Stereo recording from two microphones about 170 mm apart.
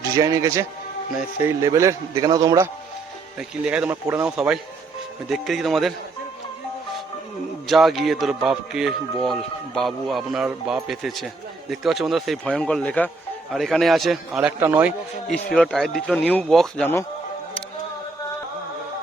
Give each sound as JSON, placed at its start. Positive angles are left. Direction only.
{"t": 0.1, "sound": "a man's voice", "side_deg": -20}
{"t": 3.3, "sound": "speech", "side_deg": -5}
{"t": 4.0, "sound": "a man's voice", "side_deg": -15}
{"t": 4.3, "sound": "speech", "side_deg": -5}
{"t": 7.7, "sound": "speech", "side_deg": 0}
{"t": 14.6, "sound": "a man's voice", "side_deg": -10}
{"t": 15.5, "sound": "speech", "side_deg": 0}